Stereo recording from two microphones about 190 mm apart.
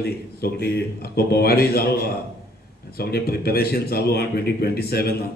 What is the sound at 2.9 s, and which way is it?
A man's voice, 55° left (ahead or behind).